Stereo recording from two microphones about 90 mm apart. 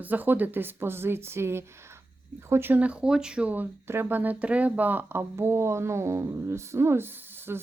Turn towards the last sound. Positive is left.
turn(degrees=-25)  # may be behind; listen again after turning